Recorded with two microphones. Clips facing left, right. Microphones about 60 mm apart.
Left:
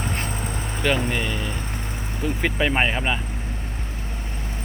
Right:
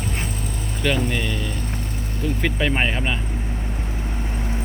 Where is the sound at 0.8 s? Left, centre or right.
Centre.